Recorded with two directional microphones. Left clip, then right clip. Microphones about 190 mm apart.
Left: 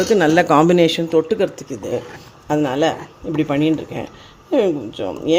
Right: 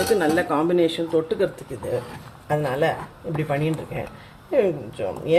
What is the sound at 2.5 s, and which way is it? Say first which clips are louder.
Speech: left 4 dB; 40° left (ahead or behind).